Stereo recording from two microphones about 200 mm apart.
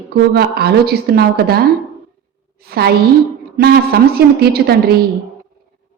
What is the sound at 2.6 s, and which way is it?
A woman's voice, 50° right (ahead or behind).